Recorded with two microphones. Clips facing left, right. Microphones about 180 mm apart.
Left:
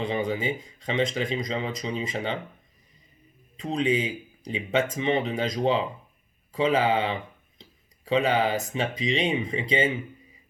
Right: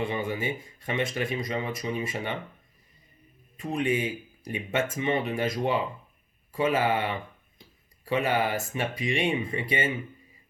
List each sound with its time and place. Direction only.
0.0 s speech: 20° left (ahead or behind)
3.6 s speech: 20° left (ahead or behind)